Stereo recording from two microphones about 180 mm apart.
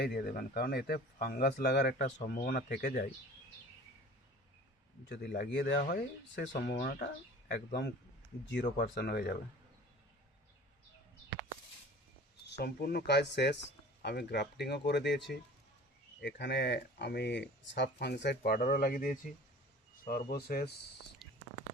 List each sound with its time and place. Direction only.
0.0 s speech: 60° left (ahead or behind)
5.0 s speech: 70° left (ahead or behind)
12.5 s speech: 65° left (ahead or behind)
21.2 s a sound: centre (ahead or behind)